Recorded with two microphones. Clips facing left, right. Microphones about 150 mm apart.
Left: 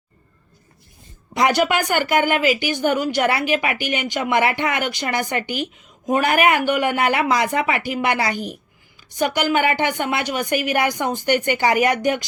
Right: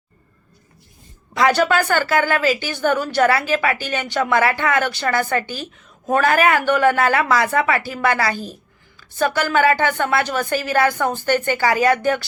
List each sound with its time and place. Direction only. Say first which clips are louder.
1.4 s a woman's voice: right 1 dB; 15° left (ahead or behind)